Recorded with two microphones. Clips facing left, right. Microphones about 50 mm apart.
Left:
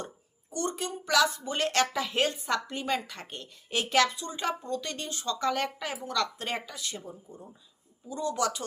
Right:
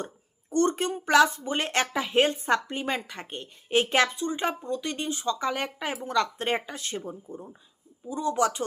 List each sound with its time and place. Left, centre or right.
0.5 s speech: right
4.6 s speech: centre; by 7.4 s right
8.0 s speech: right